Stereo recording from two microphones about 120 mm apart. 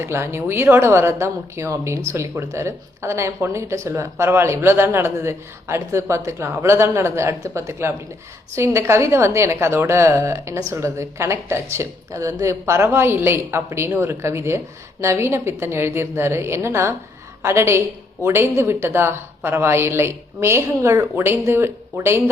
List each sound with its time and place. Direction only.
0.0 s speech: 20° right (ahead or behind)